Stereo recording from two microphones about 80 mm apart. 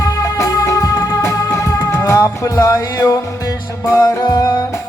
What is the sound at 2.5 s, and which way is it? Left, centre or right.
Music, left.